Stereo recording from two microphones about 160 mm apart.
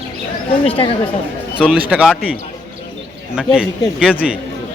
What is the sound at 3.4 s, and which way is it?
Speech, 5° right (ahead or behind).